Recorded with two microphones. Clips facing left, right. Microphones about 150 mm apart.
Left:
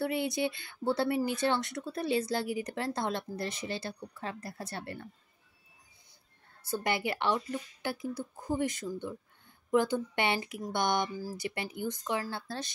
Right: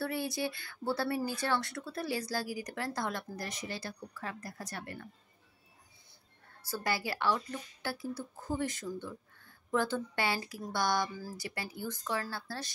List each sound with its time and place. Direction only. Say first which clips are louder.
0.0 s speech: left 4 dB; 20° left (ahead or behind)
6.7 s speech: left 3 dB; 20° left (ahead or behind)